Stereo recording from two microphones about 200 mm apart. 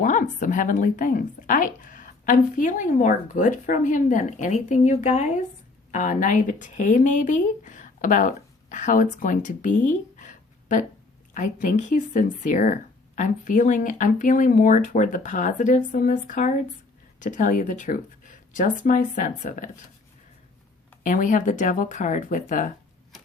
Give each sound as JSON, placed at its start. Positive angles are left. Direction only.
{"t": 0.0, "sound": "a woman's voice", "side_deg": 40}
{"t": 21.0, "sound": "a woman's voice", "side_deg": 40}